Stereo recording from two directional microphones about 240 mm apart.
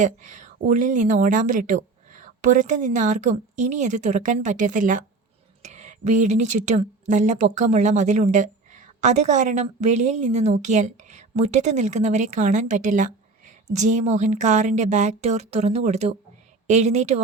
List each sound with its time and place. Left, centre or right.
0.0 s a woman's voice: right